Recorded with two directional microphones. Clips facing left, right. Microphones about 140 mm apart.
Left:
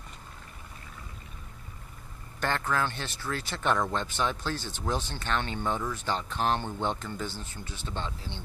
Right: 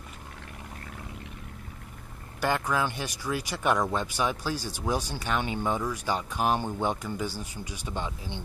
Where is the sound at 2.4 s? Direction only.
10° right (ahead or behind).